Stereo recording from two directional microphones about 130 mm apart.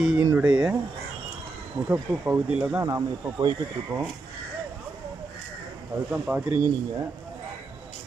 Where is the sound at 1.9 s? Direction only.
10° right (ahead or behind).